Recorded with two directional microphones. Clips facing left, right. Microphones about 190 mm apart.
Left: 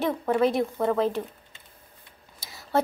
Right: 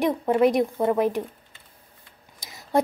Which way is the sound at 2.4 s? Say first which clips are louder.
Right 2 dB; 15° right (ahead or behind).